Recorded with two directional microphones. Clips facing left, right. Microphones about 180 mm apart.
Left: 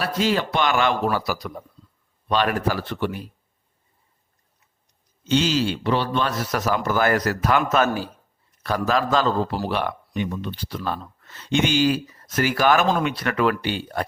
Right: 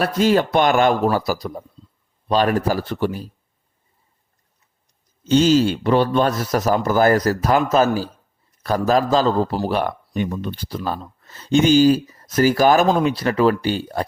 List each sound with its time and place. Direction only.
0.0 s a man's voice: 50° right (ahead or behind)
5.2 s a man's voice: 45° right (ahead or behind)